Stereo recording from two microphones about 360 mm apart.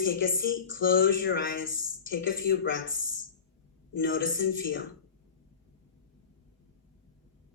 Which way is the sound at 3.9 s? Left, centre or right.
Left.